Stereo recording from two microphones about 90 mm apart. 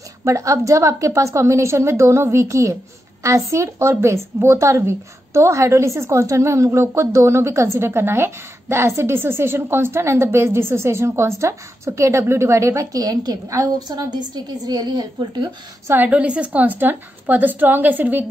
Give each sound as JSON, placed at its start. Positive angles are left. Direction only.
{"t": 0.2, "sound": "a woman's voice", "side_deg": -35}
{"t": 15.9, "sound": "a woman's voice", "side_deg": -20}